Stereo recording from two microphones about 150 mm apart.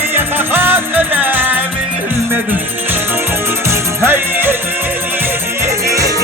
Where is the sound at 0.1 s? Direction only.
15° right (ahead or behind).